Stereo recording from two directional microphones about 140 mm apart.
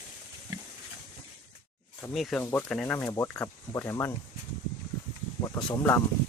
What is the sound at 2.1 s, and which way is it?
Speech, centre (ahead or behind).